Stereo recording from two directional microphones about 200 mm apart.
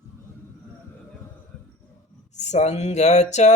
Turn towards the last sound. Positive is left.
turn(degrees=35)  # may be behind; listen again after turning